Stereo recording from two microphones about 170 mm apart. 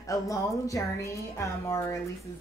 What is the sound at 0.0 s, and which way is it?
Speech, 20° left (ahead or behind).